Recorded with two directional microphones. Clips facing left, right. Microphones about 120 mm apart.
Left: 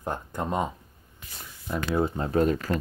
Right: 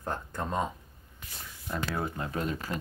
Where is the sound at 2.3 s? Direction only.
40° left (ahead or behind).